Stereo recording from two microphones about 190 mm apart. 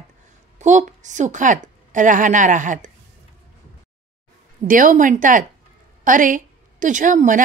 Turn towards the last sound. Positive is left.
turn(degrees=-45)  # may be behind; listen again after turning